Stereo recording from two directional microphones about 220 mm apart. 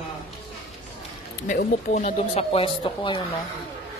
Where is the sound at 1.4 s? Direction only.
35° left (ahead or behind).